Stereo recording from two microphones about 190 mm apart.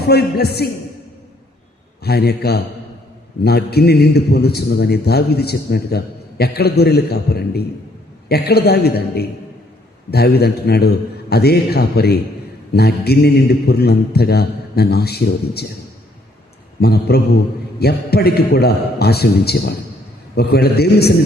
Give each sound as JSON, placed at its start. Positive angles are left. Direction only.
{"t": 0.0, "sound": "a man's voice", "side_deg": 55}
{"t": 2.0, "sound": "a man's voice", "side_deg": 55}
{"t": 16.8, "sound": "a man's voice", "side_deg": 55}